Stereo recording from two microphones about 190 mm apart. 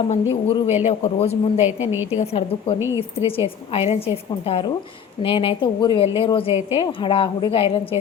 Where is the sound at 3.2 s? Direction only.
30° left (ahead or behind).